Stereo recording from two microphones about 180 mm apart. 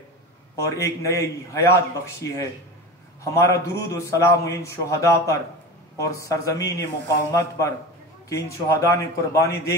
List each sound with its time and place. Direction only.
0.6 s a man's voice: 15° left (ahead or behind)
3.3 s a man's voice: 15° left (ahead or behind)